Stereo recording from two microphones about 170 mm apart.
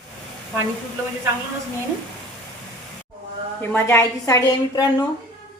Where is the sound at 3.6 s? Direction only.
15° left (ahead or behind).